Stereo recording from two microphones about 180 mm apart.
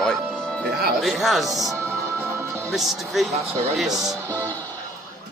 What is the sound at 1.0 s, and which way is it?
Speech, centre (ahead or behind).